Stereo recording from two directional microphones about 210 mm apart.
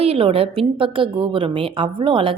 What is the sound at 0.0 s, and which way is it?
A woman's voice, 25° right (ahead or behind).